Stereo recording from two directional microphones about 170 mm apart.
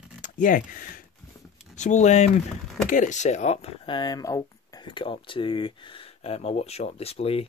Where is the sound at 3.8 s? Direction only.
25° left (ahead or behind).